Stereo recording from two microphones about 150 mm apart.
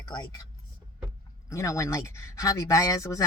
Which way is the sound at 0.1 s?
30° left (ahead or behind).